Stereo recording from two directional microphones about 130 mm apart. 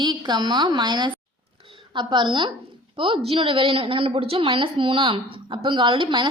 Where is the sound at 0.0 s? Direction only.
35° right (ahead or behind).